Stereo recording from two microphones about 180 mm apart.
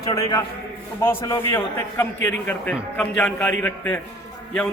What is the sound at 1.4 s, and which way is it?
A man's voice, 15° left (ahead or behind).